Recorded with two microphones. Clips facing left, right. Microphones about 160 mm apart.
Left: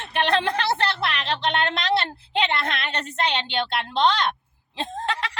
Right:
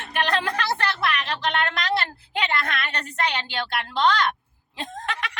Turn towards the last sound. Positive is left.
turn(degrees=30)  # may be behind; listen again after turning